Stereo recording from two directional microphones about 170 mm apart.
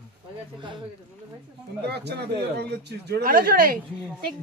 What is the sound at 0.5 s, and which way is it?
Speech, 30° right (ahead or behind).